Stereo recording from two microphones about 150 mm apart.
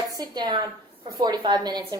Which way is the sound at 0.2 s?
30° right (ahead or behind).